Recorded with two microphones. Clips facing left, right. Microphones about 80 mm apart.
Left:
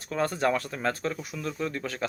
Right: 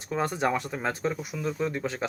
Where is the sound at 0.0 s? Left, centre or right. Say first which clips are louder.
Left 1 dB; centre.